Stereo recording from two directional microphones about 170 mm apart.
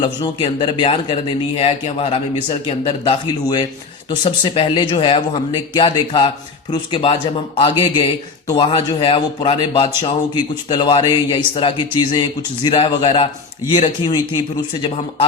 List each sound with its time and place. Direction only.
0.0 s speech: 30° left (ahead or behind)